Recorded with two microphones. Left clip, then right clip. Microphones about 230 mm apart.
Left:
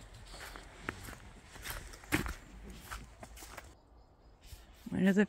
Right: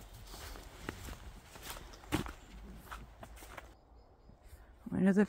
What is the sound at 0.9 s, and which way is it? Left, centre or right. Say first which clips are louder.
Walk: left 4 dB; centre.